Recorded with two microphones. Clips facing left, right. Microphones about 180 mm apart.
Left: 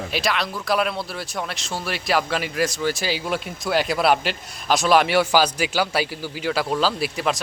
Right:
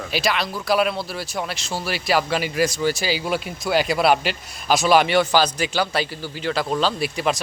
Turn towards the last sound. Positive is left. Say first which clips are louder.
# right 1 dB
turn(degrees=0)  # may be behind; listen again after turning